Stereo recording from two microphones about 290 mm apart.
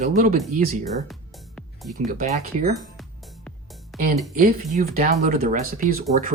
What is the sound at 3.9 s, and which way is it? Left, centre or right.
Speech, right.